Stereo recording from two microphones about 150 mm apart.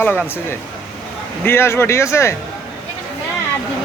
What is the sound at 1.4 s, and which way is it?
Speech, 15° left (ahead or behind).